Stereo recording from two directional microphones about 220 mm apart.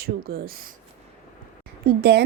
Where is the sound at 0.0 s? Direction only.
45° right (ahead or behind).